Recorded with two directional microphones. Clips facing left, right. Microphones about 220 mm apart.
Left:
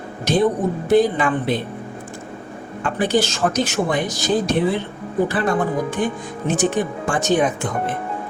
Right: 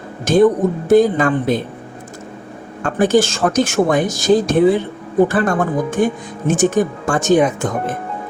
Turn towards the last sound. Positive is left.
turn(degrees=-45)  # may be behind; listen again after turning